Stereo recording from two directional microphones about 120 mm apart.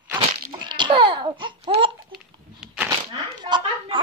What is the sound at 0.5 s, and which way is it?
Babbling, 40° right (ahead or behind).